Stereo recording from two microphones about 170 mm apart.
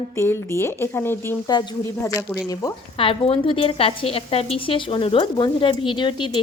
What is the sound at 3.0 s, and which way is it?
A woman's voice, 30° left (ahead or behind).